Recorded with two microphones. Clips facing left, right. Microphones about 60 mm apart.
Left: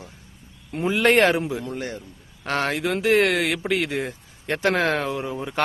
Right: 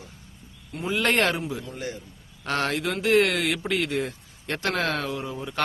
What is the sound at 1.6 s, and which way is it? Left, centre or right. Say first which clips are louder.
Speech: left 4 dB; left.